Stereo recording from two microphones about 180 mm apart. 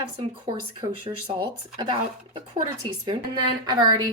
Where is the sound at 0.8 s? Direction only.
25° right (ahead or behind).